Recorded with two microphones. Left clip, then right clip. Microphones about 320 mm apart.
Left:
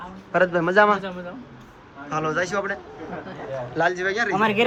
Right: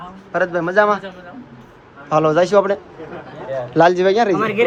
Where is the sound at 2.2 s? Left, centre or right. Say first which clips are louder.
Right 11 dB; centre.